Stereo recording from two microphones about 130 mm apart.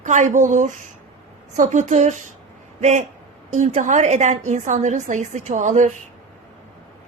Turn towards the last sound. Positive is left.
turn(degrees=-65)  # may be behind; listen again after turning